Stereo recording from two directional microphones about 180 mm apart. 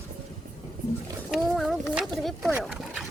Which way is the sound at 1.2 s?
Centre (ahead or behind).